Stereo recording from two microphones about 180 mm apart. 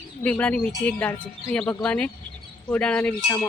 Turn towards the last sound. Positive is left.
turn(degrees=5)  # may be behind; listen again after turning